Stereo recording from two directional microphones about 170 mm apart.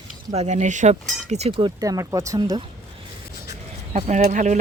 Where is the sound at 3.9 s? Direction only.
45° right (ahead or behind).